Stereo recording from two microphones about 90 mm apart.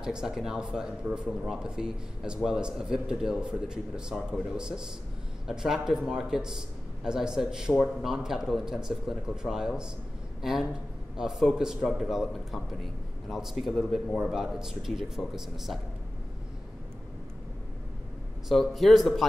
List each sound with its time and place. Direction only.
0.0 s a man's voice: 5° right (ahead or behind)
18.5 s speech: centre (ahead or behind)